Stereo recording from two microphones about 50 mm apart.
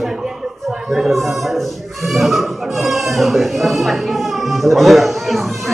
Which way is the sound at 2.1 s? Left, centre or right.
Centre.